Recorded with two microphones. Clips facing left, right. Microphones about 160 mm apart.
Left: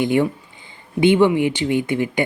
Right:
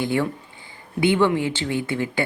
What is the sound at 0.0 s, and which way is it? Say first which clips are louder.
Speech: left 5 dB; 20° left (ahead or behind).